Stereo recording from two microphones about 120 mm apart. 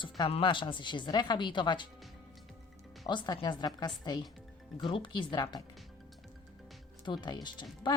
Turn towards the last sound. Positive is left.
turn(degrees=40)  # may be behind; listen again after turning